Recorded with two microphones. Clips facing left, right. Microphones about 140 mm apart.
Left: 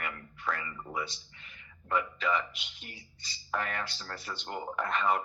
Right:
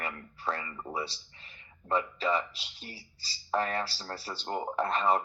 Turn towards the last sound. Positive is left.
turn(degrees=-30)  # may be behind; listen again after turning